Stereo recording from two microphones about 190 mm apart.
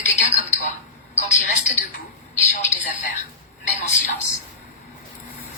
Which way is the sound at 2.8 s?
40° left (ahead or behind).